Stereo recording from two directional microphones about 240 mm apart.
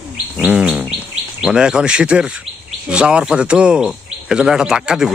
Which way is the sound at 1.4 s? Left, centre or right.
Centre.